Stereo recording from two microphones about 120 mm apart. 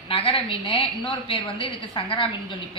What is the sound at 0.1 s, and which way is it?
A woman's voice, 50° left (ahead or behind).